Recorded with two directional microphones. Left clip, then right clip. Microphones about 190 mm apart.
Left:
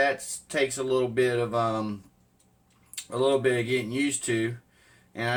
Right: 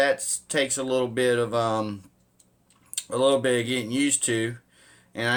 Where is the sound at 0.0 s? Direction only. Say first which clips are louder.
Right 3 dB; 50° right (ahead or behind).